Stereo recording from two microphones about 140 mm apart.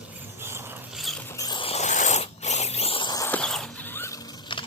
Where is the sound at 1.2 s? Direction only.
15° left (ahead or behind).